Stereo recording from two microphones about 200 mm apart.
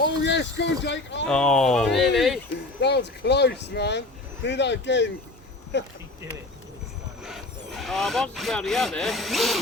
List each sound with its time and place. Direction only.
0.2 s speech: 60° left (ahead or behind)
1.3 s speech: 5° left (ahead or behind)
2.5 s speech: 60° left (ahead or behind)
7.3 s speech: centre (ahead or behind)